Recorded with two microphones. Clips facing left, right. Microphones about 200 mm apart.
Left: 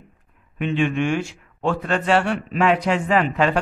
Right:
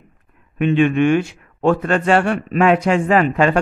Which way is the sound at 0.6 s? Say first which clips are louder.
Right 6 dB; 55° right (ahead or behind).